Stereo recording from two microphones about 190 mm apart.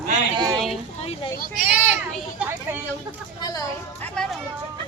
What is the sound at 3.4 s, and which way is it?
Speech, 20° left (ahead or behind).